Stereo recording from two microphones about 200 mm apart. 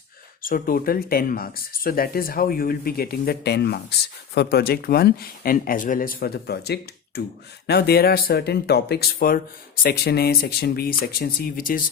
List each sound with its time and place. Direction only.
0.4 s speech: 45° left (ahead or behind)